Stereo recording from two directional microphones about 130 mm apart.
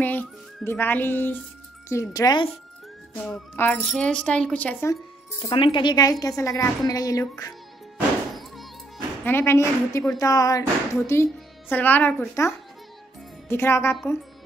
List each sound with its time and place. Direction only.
0.0 s music: 15° left (ahead or behind)
0.7 s a woman's voice: 15° left (ahead or behind)
3.2 s speech: 10° left (ahead or behind)
5.5 s a woman's voice: 40° left (ahead or behind)
8.4 s music: centre (ahead or behind)
9.2 s a woman's voice: 15° left (ahead or behind)